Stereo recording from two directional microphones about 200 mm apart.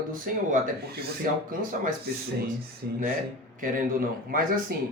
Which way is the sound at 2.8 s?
50° right (ahead or behind).